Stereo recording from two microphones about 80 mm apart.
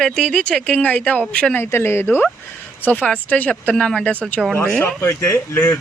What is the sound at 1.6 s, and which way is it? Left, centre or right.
Speech, left.